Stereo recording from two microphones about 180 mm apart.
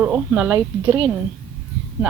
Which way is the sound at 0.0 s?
10° right (ahead or behind).